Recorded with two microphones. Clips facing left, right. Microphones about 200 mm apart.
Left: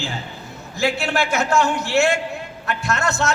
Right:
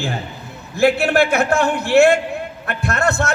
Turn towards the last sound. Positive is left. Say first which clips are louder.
# right 2 dB
turn(degrees=-55)  # may be behind; listen again after turning